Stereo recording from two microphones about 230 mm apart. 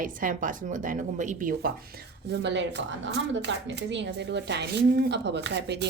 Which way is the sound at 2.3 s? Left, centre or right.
Right.